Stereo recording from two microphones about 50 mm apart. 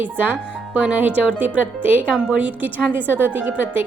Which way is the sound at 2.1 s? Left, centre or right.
Centre.